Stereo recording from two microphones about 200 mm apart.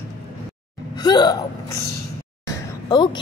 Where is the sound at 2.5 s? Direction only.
20° left (ahead or behind).